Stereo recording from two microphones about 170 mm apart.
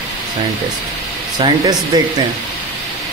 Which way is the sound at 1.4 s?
25° right (ahead or behind).